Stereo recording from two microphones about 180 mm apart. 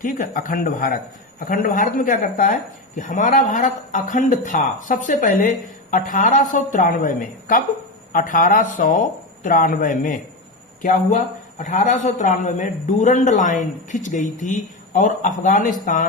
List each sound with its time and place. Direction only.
0.0 s speech: 50° left (ahead or behind)